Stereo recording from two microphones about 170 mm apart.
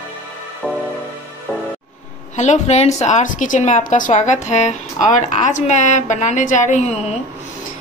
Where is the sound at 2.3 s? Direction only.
45° left (ahead or behind).